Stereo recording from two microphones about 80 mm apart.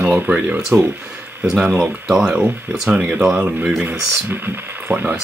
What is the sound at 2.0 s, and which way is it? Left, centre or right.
Speech, centre.